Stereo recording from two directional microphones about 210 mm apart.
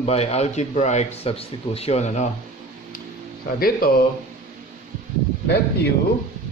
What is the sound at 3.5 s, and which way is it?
Speech, 45° left (ahead or behind).